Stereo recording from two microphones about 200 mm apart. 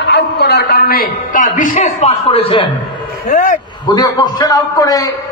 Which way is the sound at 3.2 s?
40° left (ahead or behind).